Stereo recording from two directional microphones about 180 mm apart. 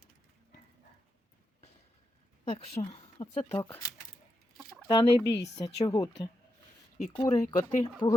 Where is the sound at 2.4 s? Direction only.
35° left (ahead or behind).